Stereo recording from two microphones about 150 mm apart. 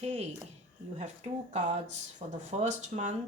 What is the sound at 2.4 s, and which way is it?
Speech, 55° right (ahead or behind).